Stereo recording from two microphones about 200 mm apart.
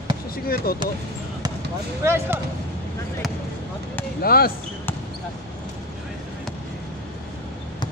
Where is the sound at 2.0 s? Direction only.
10° right (ahead or behind).